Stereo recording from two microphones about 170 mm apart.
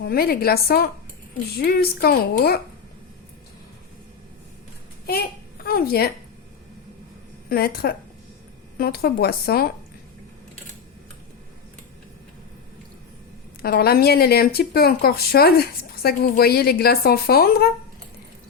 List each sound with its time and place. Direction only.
0.0 s speech: 65° left (ahead or behind)
5.6 s speech: 65° left (ahead or behind)
7.5 s speech: 65° left (ahead or behind)
13.6 s speech: 65° left (ahead or behind)